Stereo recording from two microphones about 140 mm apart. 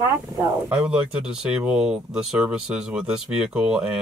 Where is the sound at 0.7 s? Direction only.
10° right (ahead or behind).